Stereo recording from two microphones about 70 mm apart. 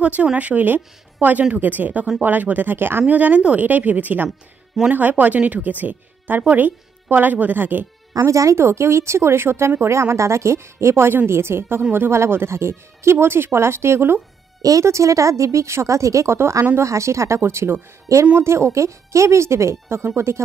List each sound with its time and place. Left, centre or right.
0.0 s speech: centre
8.3 s speech: right
14.6 s a woman's voice: right